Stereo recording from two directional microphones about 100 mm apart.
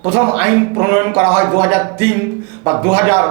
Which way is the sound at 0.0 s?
20° right (ahead or behind).